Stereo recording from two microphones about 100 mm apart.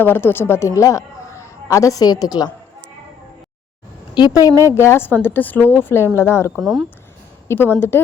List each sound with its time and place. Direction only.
0.0 s a woman's voice: 20° left (ahead or behind); by 2.5 s 40° left (ahead or behind)
4.1 s a woman's voice: 40° left (ahead or behind); by 6.5 s 25° left (ahead or behind)
6.6 s speech: centre (ahead or behind)
7.4 s a woman's voice: 25° left (ahead or behind)